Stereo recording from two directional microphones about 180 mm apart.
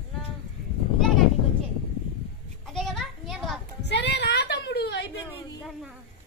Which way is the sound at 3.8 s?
70° left (ahead or behind).